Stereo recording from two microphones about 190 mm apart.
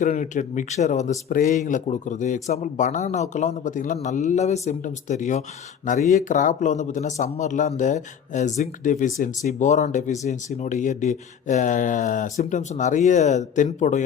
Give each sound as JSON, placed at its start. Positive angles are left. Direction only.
{"t": 0.0, "sound": "speech", "side_deg": 40}